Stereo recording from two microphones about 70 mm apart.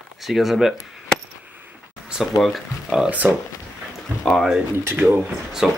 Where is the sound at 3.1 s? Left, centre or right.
Right.